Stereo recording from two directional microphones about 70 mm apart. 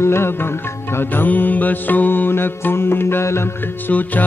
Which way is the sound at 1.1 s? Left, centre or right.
Left.